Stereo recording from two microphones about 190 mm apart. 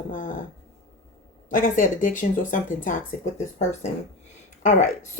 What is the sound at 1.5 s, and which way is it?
A woman's voice, 45° left (ahead or behind).